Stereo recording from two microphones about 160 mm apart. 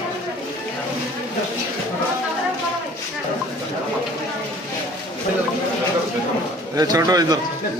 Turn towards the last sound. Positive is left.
turn(degrees=-25)  # may be behind; listen again after turning